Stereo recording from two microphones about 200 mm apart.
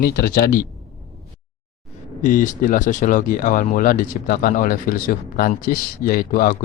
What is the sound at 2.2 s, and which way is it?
Speech, 40° left (ahead or behind).